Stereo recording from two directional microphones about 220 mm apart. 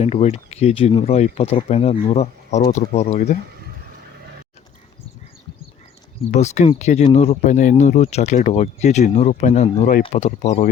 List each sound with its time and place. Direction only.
0.0 s speech: 30° left (ahead or behind)
6.3 s speech: 30° left (ahead or behind)